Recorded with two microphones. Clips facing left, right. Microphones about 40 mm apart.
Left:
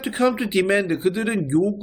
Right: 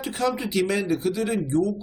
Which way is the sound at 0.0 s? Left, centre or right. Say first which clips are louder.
Left 5 dB; left.